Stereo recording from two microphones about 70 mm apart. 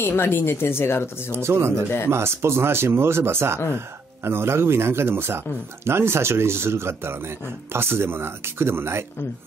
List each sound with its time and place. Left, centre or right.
0.0 s speech: left
1.3 s speech: right